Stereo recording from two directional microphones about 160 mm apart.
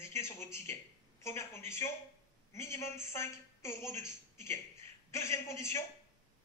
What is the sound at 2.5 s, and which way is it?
Speech, 15° left (ahead or behind).